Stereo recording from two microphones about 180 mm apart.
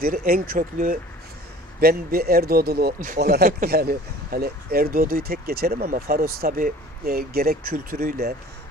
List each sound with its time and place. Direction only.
0.0 s speech: 55° right (ahead or behind)